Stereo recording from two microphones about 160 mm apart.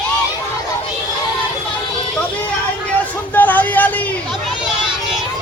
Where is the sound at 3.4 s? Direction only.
10° left (ahead or behind).